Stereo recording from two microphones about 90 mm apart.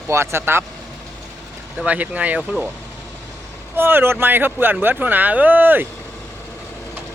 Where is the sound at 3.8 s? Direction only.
25° right (ahead or behind).